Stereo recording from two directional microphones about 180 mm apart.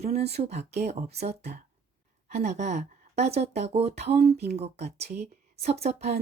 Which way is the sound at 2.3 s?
40° right (ahead or behind).